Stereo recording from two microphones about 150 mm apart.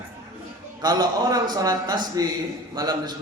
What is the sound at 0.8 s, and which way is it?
A man's voice, 25° right (ahead or behind).